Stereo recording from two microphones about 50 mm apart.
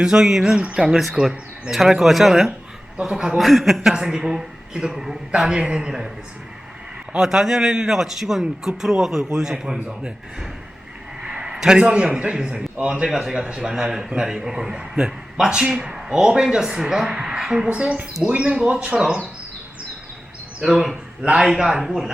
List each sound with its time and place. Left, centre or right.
0.0 s a man's voice: centre
7.2 s a man's voice: centre
11.2 s a man's voice: centre
17.7 s speech: right
20.6 s a man's voice: centre
21.2 s a man's voice: centre